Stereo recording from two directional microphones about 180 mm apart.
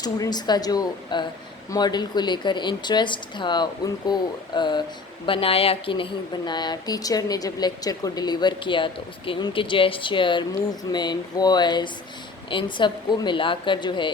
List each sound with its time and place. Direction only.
0.0 s a woman's voice: 20° left (ahead or behind)